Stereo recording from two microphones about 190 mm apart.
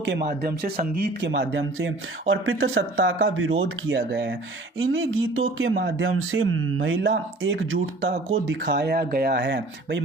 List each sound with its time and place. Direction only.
0.0 s speech: 65° right (ahead or behind)
4.8 s speech: 90° right
8.4 s speech: 65° right (ahead or behind)